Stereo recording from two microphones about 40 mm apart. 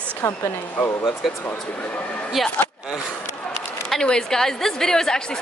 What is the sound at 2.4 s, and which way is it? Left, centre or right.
Speech, centre.